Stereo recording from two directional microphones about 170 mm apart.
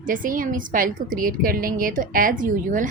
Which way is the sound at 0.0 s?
50° right (ahead or behind).